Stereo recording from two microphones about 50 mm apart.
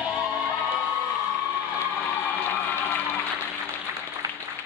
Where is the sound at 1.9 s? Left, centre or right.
Left.